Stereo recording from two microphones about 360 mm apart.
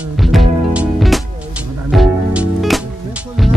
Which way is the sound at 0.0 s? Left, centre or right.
Centre.